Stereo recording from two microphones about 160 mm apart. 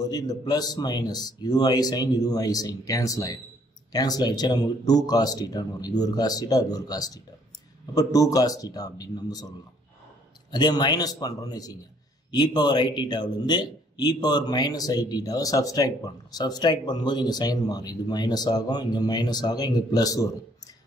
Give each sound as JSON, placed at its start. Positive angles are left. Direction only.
{"t": 0.0, "sound": "speech", "side_deg": 25}
{"t": 10.5, "sound": "speech", "side_deg": 25}